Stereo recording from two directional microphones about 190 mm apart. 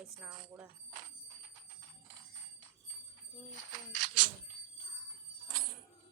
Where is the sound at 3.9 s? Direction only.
45° right (ahead or behind).